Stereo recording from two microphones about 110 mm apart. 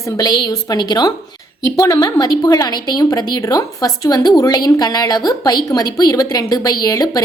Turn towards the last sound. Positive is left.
turn(degrees=35)  # may be behind; listen again after turning